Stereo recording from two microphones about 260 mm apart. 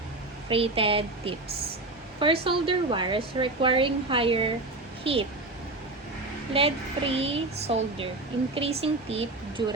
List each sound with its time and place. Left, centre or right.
0.4 s a woman's voice: right
6.5 s a woman's voice: right